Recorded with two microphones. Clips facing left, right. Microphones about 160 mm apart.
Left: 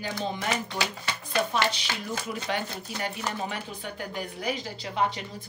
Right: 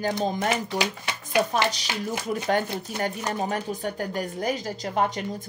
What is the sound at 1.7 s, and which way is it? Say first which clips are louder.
A woman's voice: right 3 dB; 40° right (ahead or behind).